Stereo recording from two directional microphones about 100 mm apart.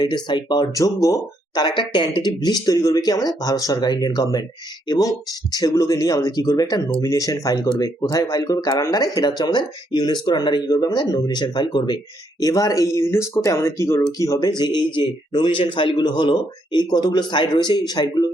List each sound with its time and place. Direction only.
0.0 s speech: 45° left (ahead or behind)
12.4 s speech: 35° left (ahead or behind)